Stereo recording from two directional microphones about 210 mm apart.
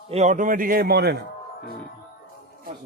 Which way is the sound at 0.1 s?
35° right (ahead or behind).